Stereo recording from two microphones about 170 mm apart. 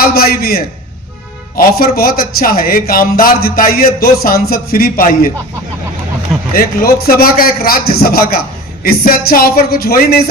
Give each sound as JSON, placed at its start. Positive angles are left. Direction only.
{"t": 0.1, "sound": "a man's voice", "side_deg": 60}
{"t": 6.5, "sound": "a man's voice", "side_deg": 60}